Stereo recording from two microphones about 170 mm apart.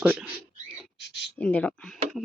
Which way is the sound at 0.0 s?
5° right (ahead or behind).